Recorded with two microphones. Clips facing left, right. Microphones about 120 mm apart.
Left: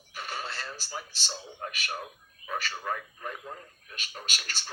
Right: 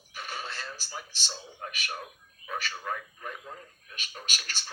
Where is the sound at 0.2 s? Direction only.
40° left (ahead or behind).